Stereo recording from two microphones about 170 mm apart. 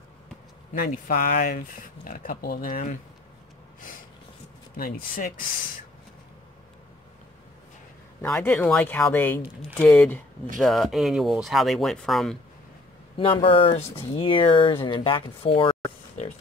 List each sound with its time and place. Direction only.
0.7 s speech: 55° left (ahead or behind)
4.7 s speech: 60° left (ahead or behind)
8.2 s speech: 5° left (ahead or behind)
13.2 s speech: 30° left (ahead or behind)